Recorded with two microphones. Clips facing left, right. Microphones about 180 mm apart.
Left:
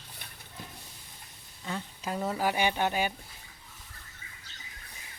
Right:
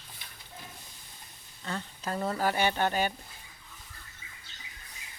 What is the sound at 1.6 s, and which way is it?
Speech, 10° left (ahead or behind).